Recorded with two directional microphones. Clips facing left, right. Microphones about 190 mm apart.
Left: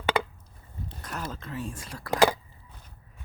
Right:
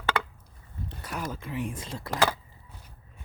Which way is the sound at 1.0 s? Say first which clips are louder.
Right 2 dB; 10° right (ahead or behind).